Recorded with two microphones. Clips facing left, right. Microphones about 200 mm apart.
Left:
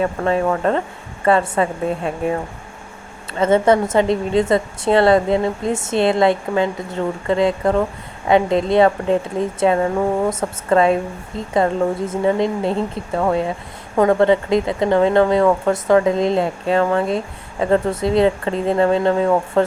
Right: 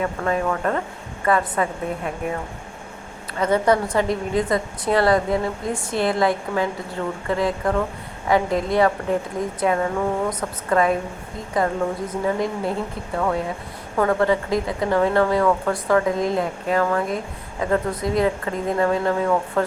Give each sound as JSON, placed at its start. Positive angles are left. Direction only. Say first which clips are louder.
{"t": 0.0, "sound": "a woman's voice", "louder": "left 4 dB", "side_deg": 30}
{"t": 3.3, "sound": "a woman's voice", "louder": "left 4 dB", "side_deg": 25}